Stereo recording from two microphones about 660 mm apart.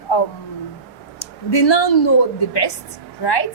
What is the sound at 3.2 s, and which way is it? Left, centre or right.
Speech, left.